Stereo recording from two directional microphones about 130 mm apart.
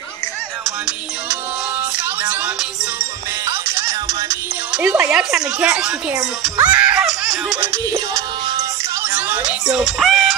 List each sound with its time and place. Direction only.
2.2 s music: 10° right (ahead or behind)
4.7 s a woman's voice: 10° right (ahead or behind)
6.6 s laughter: 10° right (ahead or behind)
7.6 s music: 25° right (ahead or behind)
9.0 s a sound: 15° right (ahead or behind)